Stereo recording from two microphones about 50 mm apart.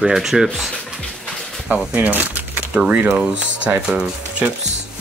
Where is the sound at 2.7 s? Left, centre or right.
Right.